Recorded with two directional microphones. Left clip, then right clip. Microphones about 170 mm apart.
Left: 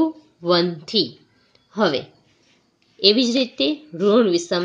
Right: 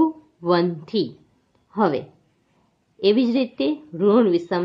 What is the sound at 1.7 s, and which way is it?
Speech, 20° left (ahead or behind).